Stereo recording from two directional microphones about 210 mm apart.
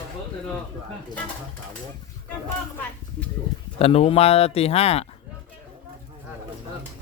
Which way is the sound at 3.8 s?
30° left (ahead or behind).